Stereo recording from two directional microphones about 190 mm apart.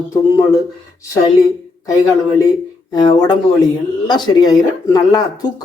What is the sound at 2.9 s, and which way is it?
Speech, 25° left (ahead or behind).